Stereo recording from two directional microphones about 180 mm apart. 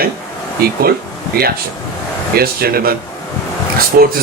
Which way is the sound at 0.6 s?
55° right (ahead or behind).